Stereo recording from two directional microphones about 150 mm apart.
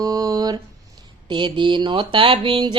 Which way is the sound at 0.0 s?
25° right (ahead or behind).